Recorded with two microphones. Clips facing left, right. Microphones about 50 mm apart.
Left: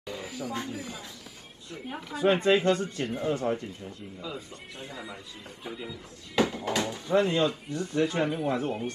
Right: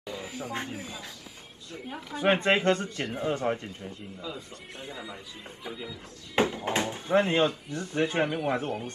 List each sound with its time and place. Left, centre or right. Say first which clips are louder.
0.0 s a sound: left 1 dB; right
1.9 s speech: left 2 dB; centre
2.1 s speech: left 1 dB; right
5.7 s speech: even; centre
6.3 s speech: even; right